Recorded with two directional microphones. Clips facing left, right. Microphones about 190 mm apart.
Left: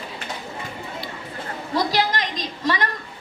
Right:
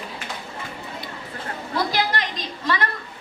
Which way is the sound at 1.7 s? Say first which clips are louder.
Left 2 dB; 20° left (ahead or behind).